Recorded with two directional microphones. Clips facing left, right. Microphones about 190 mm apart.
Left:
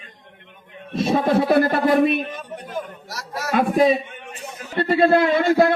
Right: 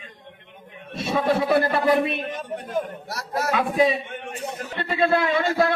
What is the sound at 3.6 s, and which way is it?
A man's voice, 45° left (ahead or behind).